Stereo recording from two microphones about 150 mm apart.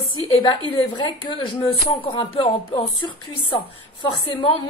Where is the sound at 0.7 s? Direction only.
30° left (ahead or behind).